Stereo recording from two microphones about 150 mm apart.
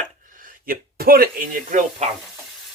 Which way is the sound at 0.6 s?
75° right (ahead or behind).